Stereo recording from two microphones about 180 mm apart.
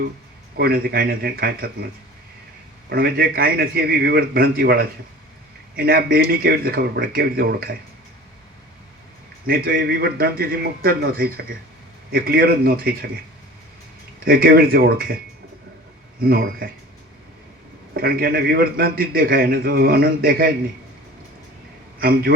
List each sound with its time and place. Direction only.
0.5 s a man's voice: 60° right (ahead or behind)
2.9 s a man's voice: 55° right (ahead or behind)
9.5 s a man's voice: 55° right (ahead or behind)
14.3 s a man's voice: 55° right (ahead or behind)
16.2 s a man's voice: 55° right (ahead or behind)
17.9 s a man's voice: 55° right (ahead or behind)
22.0 s a man's voice: 60° right (ahead or behind)